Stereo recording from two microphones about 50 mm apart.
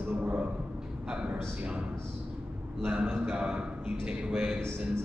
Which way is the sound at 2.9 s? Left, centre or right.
Right.